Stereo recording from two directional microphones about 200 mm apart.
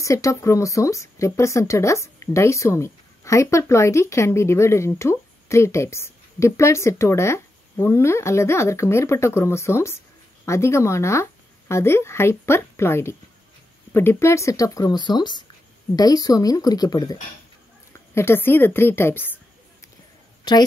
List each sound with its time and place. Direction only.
0.0 s a woman's voice: 15° left (ahead or behind)